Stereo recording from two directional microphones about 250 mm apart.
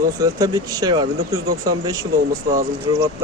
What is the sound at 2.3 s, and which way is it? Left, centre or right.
Speech, right.